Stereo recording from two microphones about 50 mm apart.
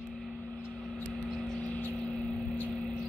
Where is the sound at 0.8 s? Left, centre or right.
Centre.